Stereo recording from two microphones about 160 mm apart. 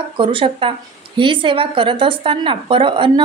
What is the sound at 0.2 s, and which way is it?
A woman's voice, 35° right (ahead or behind).